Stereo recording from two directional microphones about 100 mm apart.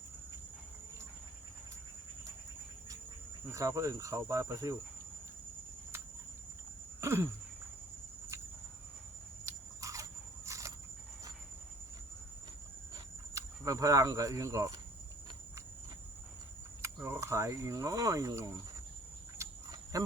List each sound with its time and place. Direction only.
3.5 s speech: 35° right (ahead or behind)
7.0 s a sound: 25° right (ahead or behind)
9.5 s a sound: 35° right (ahead or behind)
13.3 s speech: 35° right (ahead or behind)
16.8 s speech: 30° right (ahead or behind)
19.4 s cricket: 35° right (ahead or behind)